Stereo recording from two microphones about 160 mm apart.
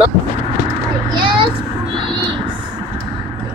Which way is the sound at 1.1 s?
30° right (ahead or behind).